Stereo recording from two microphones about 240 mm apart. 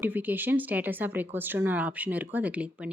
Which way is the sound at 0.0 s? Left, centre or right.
Centre.